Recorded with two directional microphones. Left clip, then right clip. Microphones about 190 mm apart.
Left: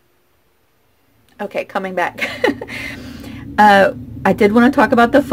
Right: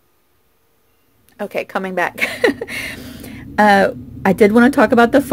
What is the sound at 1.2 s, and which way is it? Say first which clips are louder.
Speech: even; 25° right (ahead or behind).